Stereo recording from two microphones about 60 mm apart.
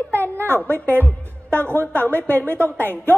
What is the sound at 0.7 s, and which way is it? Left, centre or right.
A woman's voice, left.